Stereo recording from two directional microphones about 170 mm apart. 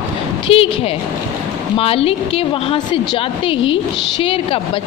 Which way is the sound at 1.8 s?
35° left (ahead or behind).